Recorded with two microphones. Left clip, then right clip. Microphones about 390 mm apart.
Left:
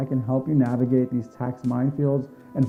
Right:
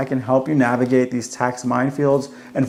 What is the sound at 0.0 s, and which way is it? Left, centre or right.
Speech, centre.